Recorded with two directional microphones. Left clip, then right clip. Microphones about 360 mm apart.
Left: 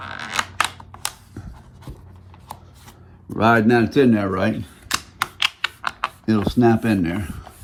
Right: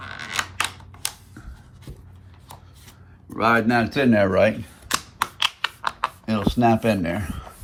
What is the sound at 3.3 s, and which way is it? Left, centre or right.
Speech, left.